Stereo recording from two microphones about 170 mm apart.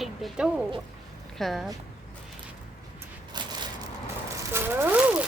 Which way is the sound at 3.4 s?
25° right (ahead or behind).